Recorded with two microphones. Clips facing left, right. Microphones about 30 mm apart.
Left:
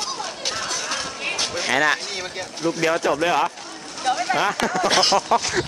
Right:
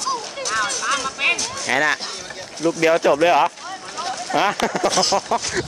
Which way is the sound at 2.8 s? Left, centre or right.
Centre.